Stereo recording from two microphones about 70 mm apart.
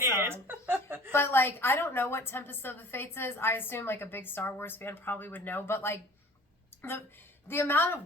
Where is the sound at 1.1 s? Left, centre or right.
Left.